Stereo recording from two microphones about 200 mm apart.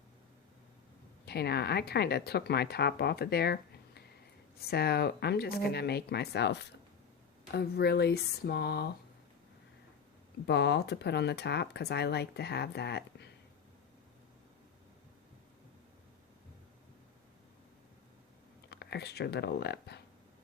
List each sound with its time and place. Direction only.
1.2 s speech: 55° left (ahead or behind)
10.4 s speech: 55° left (ahead or behind)
18.7 s speech: 55° left (ahead or behind)